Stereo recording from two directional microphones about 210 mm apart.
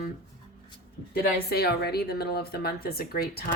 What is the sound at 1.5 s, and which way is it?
A woman's voice, 50° left (ahead or behind).